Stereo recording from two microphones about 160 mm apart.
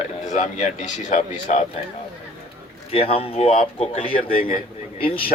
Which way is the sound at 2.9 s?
35° left (ahead or behind).